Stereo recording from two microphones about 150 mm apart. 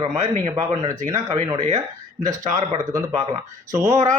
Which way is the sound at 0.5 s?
25° right (ahead or behind).